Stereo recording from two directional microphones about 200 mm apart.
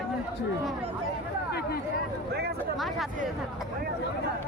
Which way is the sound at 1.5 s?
50° left (ahead or behind).